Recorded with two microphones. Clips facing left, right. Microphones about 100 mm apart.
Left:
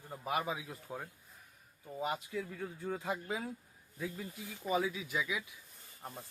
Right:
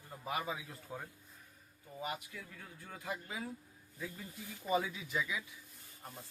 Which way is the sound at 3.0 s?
20° left (ahead or behind).